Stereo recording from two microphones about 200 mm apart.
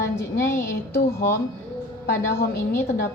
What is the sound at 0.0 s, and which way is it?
A woman's voice, 15° left (ahead or behind).